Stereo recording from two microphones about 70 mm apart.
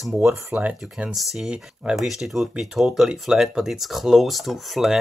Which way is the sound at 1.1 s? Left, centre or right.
Centre.